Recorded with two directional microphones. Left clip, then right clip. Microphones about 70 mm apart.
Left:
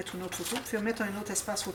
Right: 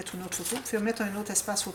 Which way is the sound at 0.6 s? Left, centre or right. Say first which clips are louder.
Right 4 dB; right.